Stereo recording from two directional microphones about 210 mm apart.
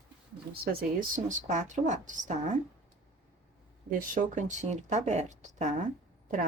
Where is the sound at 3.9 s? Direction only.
35° right (ahead or behind).